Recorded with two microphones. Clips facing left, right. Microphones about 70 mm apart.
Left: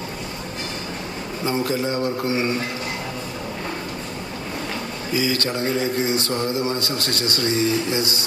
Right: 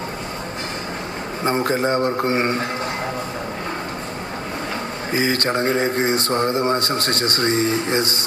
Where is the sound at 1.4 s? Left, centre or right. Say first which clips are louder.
Right 3 dB; right.